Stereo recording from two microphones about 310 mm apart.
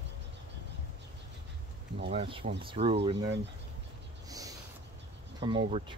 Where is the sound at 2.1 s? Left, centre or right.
Centre.